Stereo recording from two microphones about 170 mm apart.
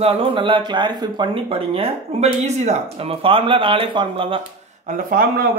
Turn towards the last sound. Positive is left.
turn(degrees=-55)  # may be behind; listen again after turning